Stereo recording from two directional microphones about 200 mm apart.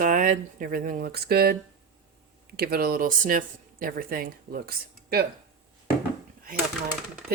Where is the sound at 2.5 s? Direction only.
50° right (ahead or behind).